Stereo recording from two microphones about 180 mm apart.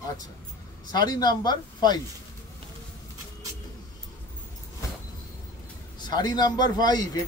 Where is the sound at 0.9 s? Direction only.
25° left (ahead or behind).